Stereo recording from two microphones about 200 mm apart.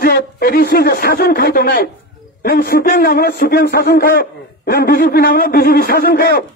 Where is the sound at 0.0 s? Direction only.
50° left (ahead or behind).